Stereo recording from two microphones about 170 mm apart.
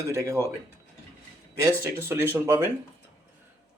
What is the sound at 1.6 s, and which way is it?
Speech, 15° right (ahead or behind).